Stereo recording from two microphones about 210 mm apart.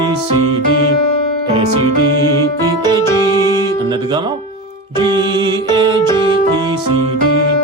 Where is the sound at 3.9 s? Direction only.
20° right (ahead or behind).